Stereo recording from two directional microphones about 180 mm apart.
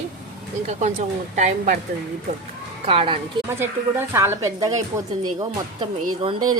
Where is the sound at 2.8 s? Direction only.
30° right (ahead or behind).